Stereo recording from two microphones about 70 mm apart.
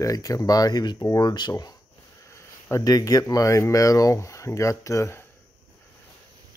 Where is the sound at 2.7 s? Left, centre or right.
Left.